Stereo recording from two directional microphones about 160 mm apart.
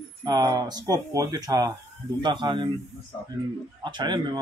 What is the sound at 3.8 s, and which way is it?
Speech, 30° right (ahead or behind).